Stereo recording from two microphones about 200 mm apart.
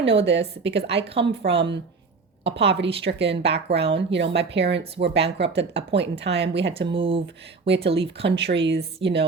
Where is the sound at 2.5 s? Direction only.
30° right (ahead or behind).